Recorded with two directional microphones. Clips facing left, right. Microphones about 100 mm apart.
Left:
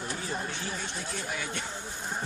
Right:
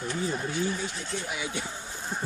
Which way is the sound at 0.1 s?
5° right (ahead or behind).